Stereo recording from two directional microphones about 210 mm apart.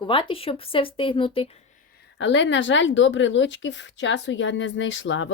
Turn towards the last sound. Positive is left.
turn(degrees=65)  # may be behind; listen again after turning